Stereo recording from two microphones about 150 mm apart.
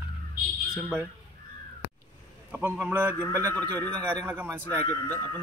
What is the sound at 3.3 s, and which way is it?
A man's voice, 20° right (ahead or behind).